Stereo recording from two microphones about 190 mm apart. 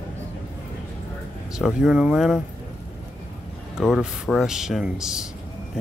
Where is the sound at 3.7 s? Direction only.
5° right (ahead or behind).